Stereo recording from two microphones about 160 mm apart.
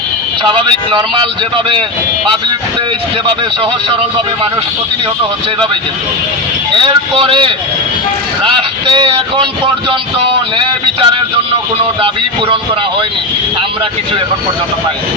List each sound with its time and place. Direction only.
6.7 s speech: 35° right (ahead or behind)
10.6 s speech: 30° right (ahead or behind)